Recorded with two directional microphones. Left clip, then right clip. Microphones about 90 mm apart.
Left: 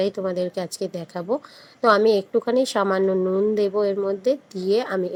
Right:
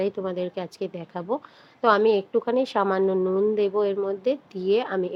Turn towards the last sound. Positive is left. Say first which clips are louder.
# left 1 dB
turn(degrees=25)  # may be behind; listen again after turning